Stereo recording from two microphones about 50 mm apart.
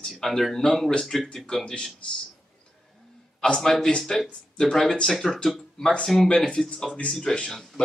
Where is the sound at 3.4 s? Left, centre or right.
Centre.